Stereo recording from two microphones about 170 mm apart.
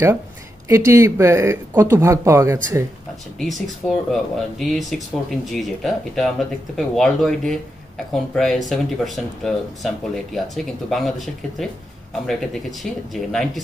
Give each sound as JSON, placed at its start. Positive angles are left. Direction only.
{"t": 0.7, "sound": "speech", "side_deg": -15}
{"t": 3.3, "sound": "speech", "side_deg": 0}